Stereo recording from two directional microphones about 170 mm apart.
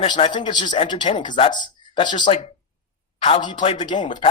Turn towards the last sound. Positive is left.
turn(degrees=25)  # may be behind; listen again after turning